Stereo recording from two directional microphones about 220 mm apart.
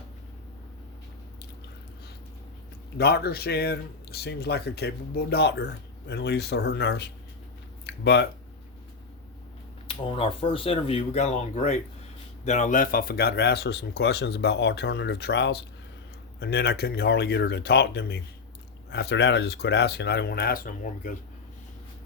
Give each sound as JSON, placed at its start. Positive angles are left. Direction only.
{"t": 3.0, "sound": "speech", "side_deg": 45}
{"t": 9.8, "sound": "speech", "side_deg": 25}